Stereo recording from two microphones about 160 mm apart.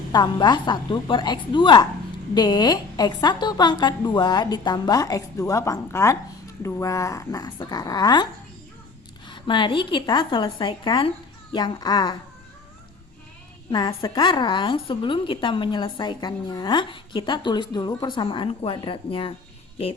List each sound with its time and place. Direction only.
0.1 s a woman's voice: 25° left (ahead or behind)
13.7 s a woman's voice: 30° left (ahead or behind)